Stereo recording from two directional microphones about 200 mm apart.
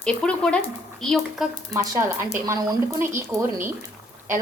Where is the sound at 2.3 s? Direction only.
15° right (ahead or behind).